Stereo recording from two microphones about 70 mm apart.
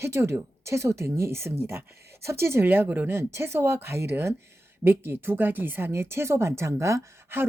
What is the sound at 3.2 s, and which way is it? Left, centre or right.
Speech, right.